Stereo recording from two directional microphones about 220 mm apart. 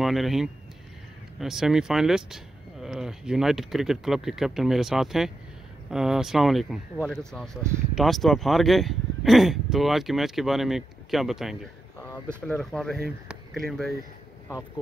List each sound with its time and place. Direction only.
0.0 s speech: centre (ahead or behind)